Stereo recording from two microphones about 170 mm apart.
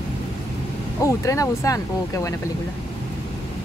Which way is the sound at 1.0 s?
20° left (ahead or behind).